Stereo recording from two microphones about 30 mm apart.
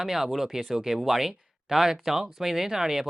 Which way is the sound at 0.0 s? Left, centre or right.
Centre.